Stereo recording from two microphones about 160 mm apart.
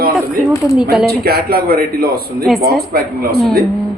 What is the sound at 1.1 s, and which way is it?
A man's voice, 80° right.